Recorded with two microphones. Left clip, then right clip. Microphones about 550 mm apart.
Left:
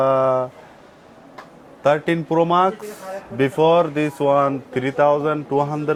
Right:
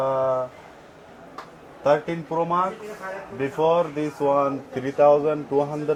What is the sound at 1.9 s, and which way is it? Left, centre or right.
Speech, left.